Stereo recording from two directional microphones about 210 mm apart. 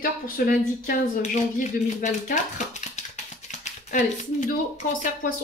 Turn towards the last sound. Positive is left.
turn(degrees=40)  # may be behind; listen again after turning